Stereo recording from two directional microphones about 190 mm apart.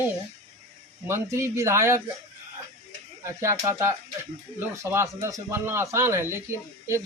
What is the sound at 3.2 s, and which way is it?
Speech, 15° right (ahead or behind).